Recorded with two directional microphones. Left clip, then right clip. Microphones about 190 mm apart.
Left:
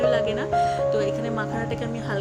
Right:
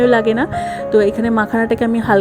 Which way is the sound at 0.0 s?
35° right (ahead or behind).